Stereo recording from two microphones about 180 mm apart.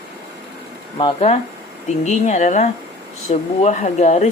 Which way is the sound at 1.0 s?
35° left (ahead or behind).